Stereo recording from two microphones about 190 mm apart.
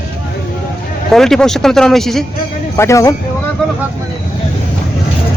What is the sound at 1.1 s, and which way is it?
Speech, centre (ahead or behind).